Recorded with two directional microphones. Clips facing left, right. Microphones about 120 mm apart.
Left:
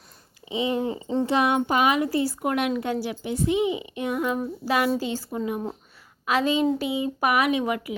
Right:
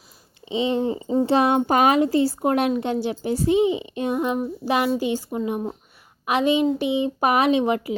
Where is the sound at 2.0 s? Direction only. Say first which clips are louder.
Right 5 dB; 25° right (ahead or behind).